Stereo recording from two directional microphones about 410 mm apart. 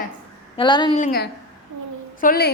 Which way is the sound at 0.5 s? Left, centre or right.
Centre.